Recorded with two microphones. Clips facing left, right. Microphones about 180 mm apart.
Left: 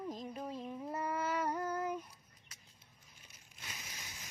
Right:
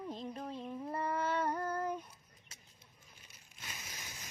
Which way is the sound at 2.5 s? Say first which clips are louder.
Right 2 dB; 25° right (ahead or behind).